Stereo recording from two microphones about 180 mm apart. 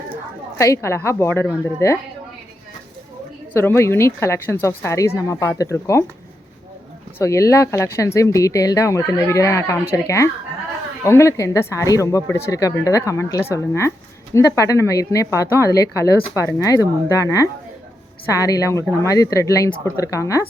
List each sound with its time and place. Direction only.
0.6 s speech: 15° left (ahead or behind)
3.5 s speech: 15° left (ahead or behind)
7.2 s speech: 15° left (ahead or behind)